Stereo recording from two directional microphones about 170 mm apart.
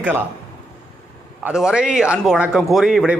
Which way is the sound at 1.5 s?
5° right (ahead or behind).